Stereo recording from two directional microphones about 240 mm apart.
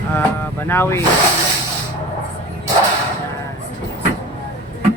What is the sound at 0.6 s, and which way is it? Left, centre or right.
Speech, centre.